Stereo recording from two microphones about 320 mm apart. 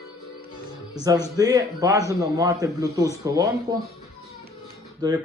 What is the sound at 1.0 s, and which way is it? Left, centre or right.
Speech, centre.